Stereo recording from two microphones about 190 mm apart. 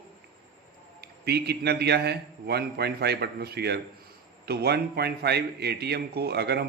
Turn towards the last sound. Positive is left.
turn(degrees=-60)  # may be behind; listen again after turning